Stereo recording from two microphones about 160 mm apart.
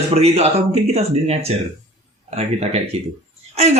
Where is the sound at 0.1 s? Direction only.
40° right (ahead or behind).